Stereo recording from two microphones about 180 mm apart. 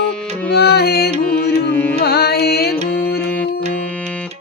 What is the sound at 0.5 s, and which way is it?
Music, 65° left (ahead or behind).